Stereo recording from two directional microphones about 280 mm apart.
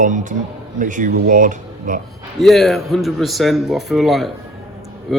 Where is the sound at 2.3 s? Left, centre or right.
Centre.